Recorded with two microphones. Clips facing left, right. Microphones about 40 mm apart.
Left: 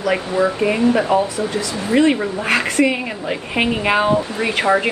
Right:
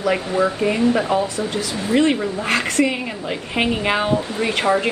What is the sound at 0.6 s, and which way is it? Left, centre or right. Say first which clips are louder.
Speech: left 2 dB; left.